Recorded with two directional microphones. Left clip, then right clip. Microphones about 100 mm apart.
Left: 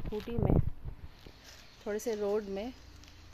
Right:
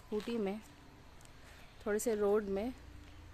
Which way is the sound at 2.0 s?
30° right (ahead or behind).